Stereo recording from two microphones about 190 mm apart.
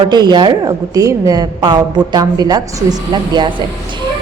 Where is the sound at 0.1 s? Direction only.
25° right (ahead or behind).